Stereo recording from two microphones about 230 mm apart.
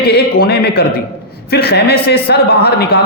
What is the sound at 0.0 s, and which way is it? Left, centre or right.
A man's voice, left.